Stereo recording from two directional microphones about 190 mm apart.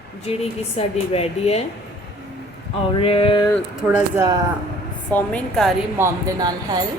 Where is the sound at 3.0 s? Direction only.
30° left (ahead or behind).